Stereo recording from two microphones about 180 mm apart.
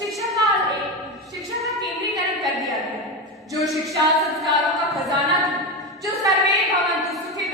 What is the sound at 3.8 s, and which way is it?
A woman's voice, centre (ahead or behind).